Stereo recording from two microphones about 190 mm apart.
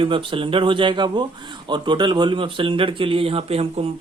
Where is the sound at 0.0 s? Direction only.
25° right (ahead or behind).